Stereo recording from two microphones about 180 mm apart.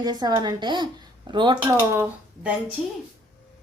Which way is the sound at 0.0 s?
20° right (ahead or behind).